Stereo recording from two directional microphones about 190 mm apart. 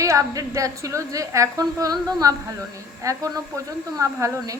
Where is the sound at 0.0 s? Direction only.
15° right (ahead or behind).